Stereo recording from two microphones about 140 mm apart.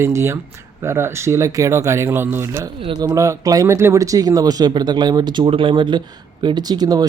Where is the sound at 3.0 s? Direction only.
20° right (ahead or behind).